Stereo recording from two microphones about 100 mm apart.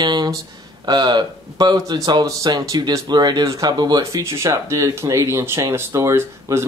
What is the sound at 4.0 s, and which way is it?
Speech, 30° right (ahead or behind).